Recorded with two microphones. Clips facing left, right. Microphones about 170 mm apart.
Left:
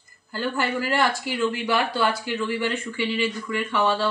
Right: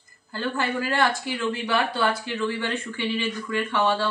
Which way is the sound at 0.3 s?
25° right (ahead or behind).